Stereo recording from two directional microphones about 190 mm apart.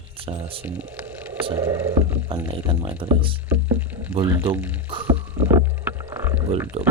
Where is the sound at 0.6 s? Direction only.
10° right (ahead or behind).